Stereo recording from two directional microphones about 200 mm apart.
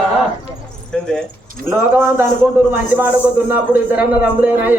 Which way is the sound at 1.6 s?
10° right (ahead or behind).